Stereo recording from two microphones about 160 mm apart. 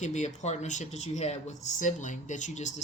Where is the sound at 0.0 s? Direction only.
45° left (ahead or behind).